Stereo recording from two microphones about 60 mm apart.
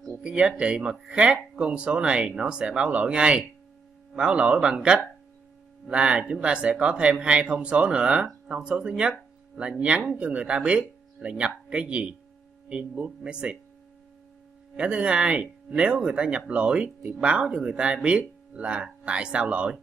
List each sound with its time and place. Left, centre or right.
0.2 s speech: centre
14.8 s speech: centre